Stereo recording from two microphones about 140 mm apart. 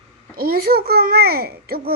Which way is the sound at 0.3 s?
90° right.